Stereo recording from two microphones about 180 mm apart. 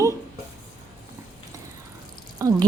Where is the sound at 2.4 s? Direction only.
15° right (ahead or behind).